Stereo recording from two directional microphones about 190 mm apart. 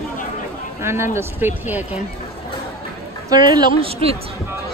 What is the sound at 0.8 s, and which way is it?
Speech, 15° right (ahead or behind).